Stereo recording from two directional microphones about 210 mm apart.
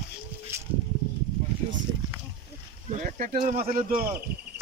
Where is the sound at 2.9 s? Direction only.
35° right (ahead or behind).